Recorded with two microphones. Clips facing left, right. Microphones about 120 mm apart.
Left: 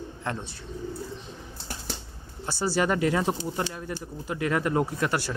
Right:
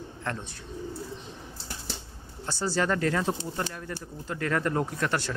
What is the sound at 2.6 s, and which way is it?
Speech, 10° left (ahead or behind).